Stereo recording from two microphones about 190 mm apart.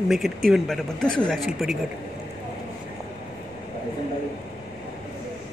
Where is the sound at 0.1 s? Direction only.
Centre (ahead or behind).